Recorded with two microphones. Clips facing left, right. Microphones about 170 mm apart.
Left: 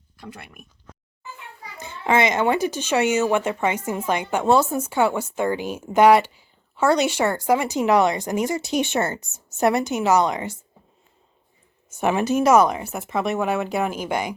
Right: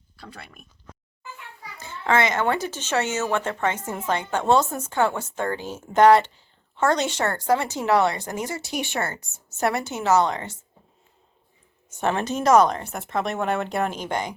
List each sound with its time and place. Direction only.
0.2 s speech: 15° left (ahead or behind)
1.8 s speech: 15° left (ahead or behind)
11.9 s speech: 10° left (ahead or behind)